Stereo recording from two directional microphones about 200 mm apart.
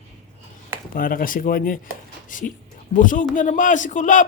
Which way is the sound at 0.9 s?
45° left (ahead or behind).